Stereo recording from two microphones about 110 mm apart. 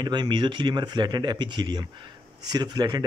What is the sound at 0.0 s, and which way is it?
Speech, 40° right (ahead or behind).